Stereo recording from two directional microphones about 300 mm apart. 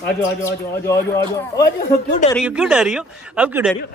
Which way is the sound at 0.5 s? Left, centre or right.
Centre.